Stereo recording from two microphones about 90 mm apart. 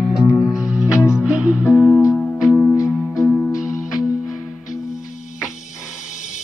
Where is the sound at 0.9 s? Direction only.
35° left (ahead or behind).